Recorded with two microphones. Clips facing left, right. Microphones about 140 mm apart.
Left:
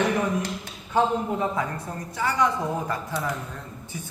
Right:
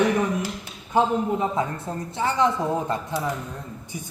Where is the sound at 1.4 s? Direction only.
25° right (ahead or behind).